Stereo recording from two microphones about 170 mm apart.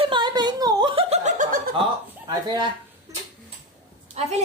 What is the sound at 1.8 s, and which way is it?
Speech, 25° right (ahead or behind).